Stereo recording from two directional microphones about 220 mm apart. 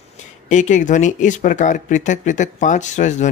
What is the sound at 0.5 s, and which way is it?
Speech, 35° left (ahead or behind).